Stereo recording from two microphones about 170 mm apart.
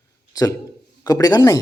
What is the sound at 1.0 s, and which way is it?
Speech, 20° left (ahead or behind).